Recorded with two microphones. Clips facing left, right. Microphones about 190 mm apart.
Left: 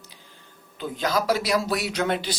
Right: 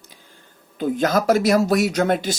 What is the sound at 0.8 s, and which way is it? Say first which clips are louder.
Speech: right 6 dB; 50° right (ahead or behind).